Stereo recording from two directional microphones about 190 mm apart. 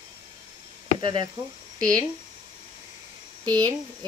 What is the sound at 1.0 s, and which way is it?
Speech, 25° right (ahead or behind).